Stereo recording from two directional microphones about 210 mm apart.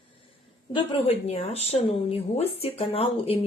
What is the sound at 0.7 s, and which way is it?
Speech, 25° left (ahead or behind).